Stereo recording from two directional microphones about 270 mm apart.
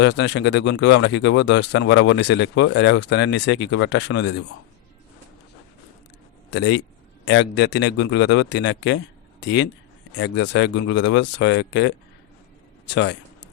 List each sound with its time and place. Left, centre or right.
0.0 s speech: left
6.5 s speech: left